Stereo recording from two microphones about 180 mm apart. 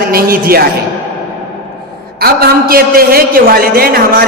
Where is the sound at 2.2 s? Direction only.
55° right (ahead or behind).